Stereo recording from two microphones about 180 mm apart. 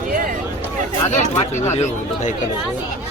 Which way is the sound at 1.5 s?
40° left (ahead or behind).